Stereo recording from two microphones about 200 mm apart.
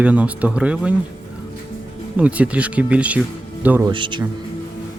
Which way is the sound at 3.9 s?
25° right (ahead or behind).